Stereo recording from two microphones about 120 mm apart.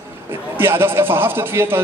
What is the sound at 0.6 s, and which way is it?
A man's voice, 20° right (ahead or behind).